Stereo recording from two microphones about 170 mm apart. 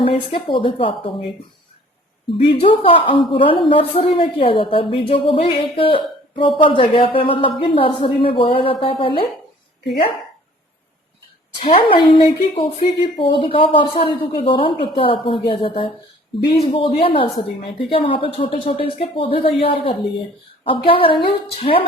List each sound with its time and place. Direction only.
0.0 s a woman's voice: 35° left (ahead or behind)
2.5 s a woman's voice: 35° left (ahead or behind)
11.6 s a woman's voice: 30° left (ahead or behind)